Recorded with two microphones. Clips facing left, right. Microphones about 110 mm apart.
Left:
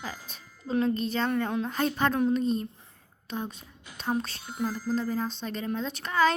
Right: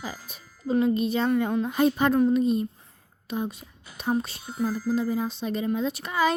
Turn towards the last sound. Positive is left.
turn(degrees=-10)  # may be behind; listen again after turning